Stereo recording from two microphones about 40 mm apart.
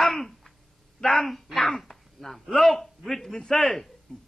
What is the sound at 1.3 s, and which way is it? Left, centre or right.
A man's voice, centre.